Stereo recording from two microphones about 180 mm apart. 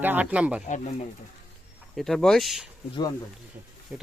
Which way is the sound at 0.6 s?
40° left (ahead or behind).